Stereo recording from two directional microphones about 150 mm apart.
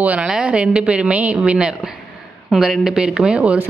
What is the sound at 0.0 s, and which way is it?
A woman's voice, 10° right (ahead or behind).